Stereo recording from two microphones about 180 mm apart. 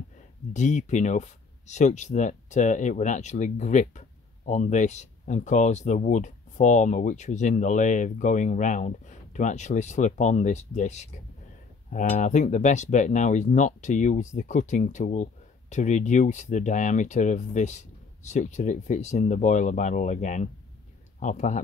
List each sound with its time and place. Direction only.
0.5 s speech: 40° left (ahead or behind)